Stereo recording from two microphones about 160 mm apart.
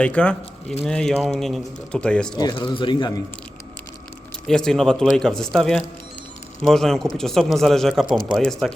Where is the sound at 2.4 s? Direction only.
25° left (ahead or behind).